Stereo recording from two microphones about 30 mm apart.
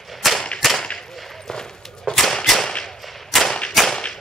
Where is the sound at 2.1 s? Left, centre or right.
Centre.